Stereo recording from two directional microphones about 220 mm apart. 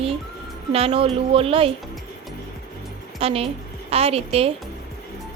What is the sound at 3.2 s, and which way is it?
A woman's voice, 25° right (ahead or behind).